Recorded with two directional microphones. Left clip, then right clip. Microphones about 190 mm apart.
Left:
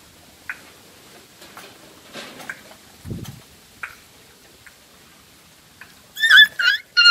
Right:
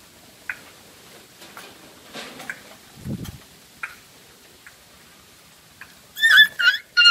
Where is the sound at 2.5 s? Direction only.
40° left (ahead or behind).